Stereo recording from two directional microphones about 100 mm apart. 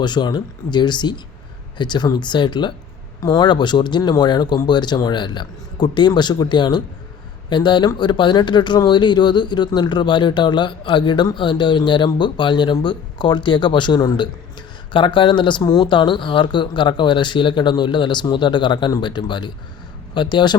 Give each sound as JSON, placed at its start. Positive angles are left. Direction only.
{"t": 0.0, "sound": "speech", "side_deg": 50}